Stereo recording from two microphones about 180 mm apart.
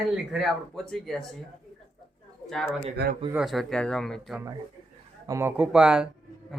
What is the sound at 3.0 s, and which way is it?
Speech, 65° right (ahead or behind).